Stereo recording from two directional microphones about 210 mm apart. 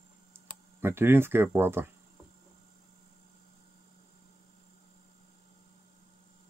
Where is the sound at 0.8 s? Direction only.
10° right (ahead or behind).